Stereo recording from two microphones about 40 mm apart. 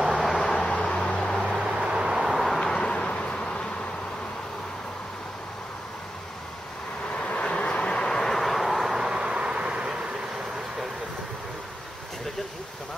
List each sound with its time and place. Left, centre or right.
0.1 s vehicle: centre
0.5 s vehicle: left
1.5 s music: centre
2.4 s vehicle: centre
2.7 s vehicle: left
7.2 s vehicle: left; by 8.9 s centre
8.9 s vehicle: centre